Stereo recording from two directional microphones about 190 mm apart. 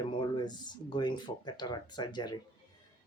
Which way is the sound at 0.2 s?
20° left (ahead or behind).